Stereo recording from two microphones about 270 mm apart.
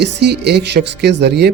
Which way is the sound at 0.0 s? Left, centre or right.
Right.